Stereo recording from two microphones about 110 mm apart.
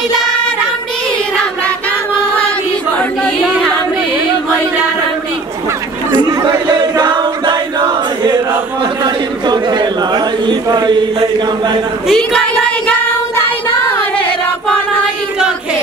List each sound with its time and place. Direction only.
6.1 s chant: 40° right (ahead or behind)
9.0 s a sound: 40° right (ahead or behind)
12.1 s speech: 5° left (ahead or behind)